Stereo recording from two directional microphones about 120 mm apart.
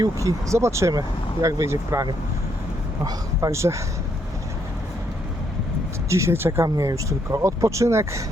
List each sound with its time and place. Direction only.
0.0 s speech: 25° right (ahead or behind)
6.1 s speech: 25° right (ahead or behind)